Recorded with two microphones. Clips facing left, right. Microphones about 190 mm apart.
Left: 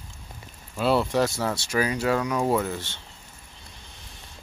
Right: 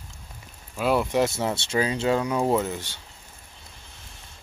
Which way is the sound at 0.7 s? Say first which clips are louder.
Even; 10° right (ahead or behind).